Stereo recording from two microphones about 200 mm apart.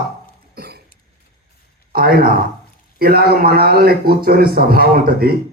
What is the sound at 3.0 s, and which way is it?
Speech, 50° right (ahead or behind).